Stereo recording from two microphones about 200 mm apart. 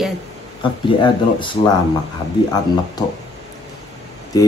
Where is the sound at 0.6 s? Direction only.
25° left (ahead or behind).